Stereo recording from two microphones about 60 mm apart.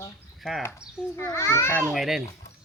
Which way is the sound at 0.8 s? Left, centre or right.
Left.